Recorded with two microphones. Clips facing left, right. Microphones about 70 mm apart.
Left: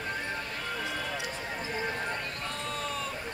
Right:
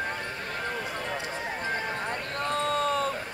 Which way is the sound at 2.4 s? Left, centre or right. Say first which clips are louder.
Right 9 dB; right.